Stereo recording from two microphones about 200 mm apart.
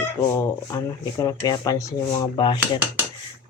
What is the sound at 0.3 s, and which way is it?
Speech, 15° left (ahead or behind).